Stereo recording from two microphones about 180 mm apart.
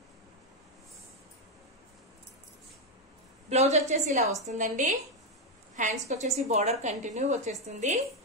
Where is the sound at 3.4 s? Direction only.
40° right (ahead or behind).